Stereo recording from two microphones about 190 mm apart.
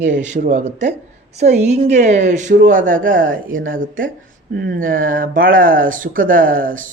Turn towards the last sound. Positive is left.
turn(degrees=-45)  # may be behind; listen again after turning